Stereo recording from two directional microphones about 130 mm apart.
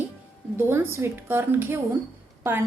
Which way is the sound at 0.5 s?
20° right (ahead or behind).